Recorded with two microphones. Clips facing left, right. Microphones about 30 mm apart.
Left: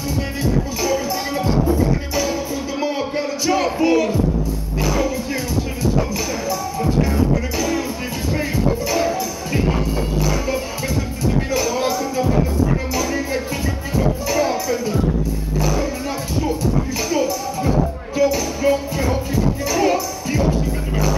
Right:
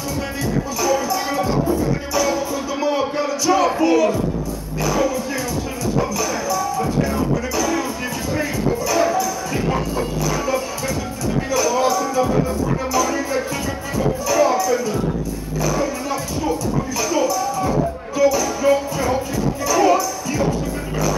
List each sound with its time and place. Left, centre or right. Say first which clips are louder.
0.7 s music: right 1 dB; centre
3.2 s a sound: even; centre
3.8 s speech: right 1 dB; centre
4.8 s music: right 1 dB; centre